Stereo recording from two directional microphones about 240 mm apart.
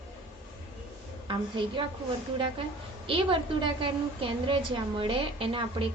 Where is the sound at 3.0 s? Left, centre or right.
Right.